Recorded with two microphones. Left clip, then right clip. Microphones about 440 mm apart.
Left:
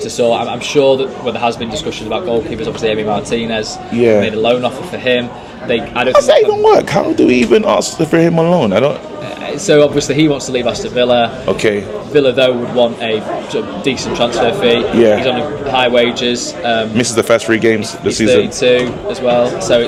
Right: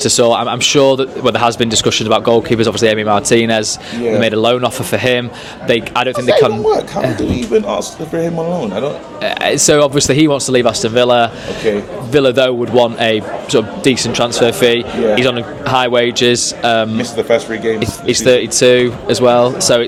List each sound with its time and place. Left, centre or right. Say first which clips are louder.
0.0 s a man's voice: right 2 dB; right
6.2 s a man's voice: left 2 dB; left
9.4 s a man's voice: even; right
17.0 s a man's voice: left 2 dB; left
18.3 s speech: right 1 dB; right